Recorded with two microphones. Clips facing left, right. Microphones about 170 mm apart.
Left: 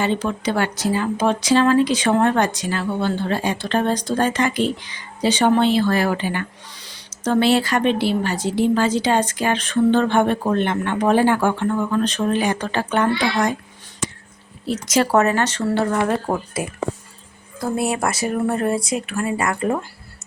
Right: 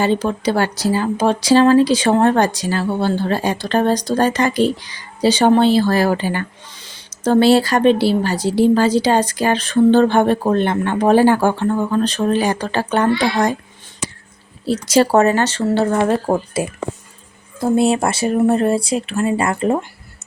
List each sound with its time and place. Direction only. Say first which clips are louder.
0.0 s speech: right 4 dB; 35° right (ahead or behind)
6.7 s owl: right 1 dB; 25° right (ahead or behind)
7.3 s speech: right 5 dB; 35° right (ahead or behind)
14.6 s speech: right 5 dB; 35° right (ahead or behind)